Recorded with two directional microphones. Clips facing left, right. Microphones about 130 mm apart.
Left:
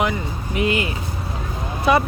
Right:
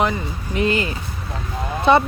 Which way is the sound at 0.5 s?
35° right (ahead or behind).